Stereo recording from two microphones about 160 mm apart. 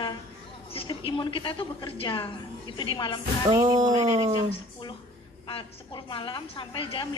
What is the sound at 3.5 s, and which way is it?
Music, 25° right (ahead or behind).